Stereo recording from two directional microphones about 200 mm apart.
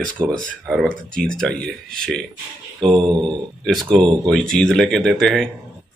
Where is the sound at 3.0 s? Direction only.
20° right (ahead or behind).